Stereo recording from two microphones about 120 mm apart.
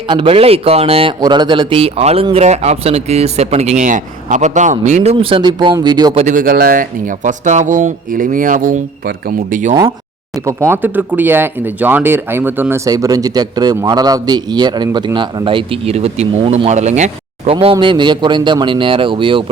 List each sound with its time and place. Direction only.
0.1 s a man's voice: 50° right (ahead or behind)
1.2 s a man's voice: 40° right (ahead or behind); by 5.1 s 80° right
5.4 s speech: 40° right (ahead or behind)
6.1 s speech: 90° right
10.4 s a man's voice: 20° right (ahead or behind); by 19.5 s 45° right (ahead or behind)